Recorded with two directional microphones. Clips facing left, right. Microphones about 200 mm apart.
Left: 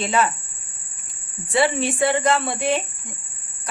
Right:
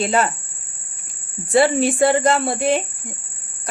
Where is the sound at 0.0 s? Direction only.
35° right (ahead or behind).